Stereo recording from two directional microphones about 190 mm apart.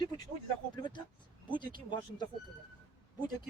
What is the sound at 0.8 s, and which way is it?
Speech, 25° left (ahead or behind).